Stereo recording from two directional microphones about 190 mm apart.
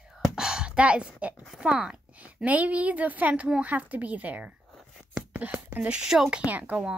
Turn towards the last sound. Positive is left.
turn(degrees=-5)  # may be behind; listen again after turning